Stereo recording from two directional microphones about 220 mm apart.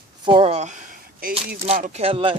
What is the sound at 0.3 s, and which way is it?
Speech, 25° right (ahead or behind).